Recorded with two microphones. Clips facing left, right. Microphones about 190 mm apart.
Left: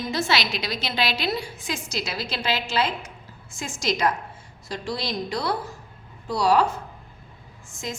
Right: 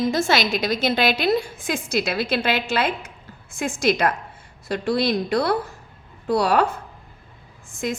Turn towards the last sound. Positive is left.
turn(degrees=-55)  # may be behind; listen again after turning